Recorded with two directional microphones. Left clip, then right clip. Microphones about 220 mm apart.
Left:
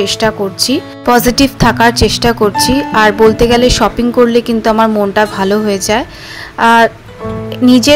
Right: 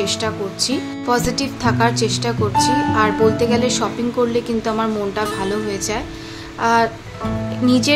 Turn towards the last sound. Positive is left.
turn(degrees=35)  # may be behind; listen again after turning